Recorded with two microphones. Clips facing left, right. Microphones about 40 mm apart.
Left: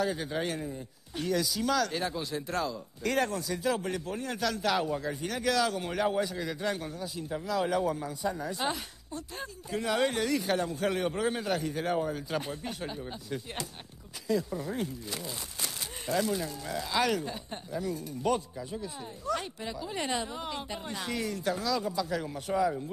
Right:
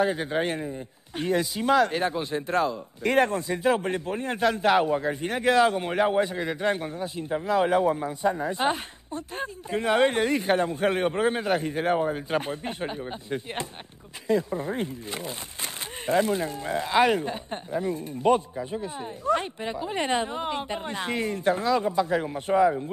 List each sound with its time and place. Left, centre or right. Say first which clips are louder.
0.0 s speech: right 6 dB; right